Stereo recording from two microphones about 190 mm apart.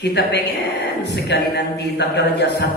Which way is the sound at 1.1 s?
60° left (ahead or behind).